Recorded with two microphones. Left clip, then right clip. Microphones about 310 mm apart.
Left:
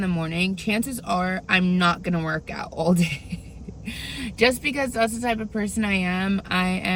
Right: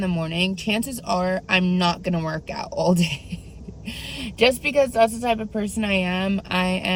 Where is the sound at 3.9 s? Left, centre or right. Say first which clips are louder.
Even; right.